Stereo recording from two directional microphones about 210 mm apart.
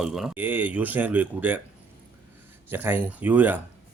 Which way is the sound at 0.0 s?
Centre (ahead or behind).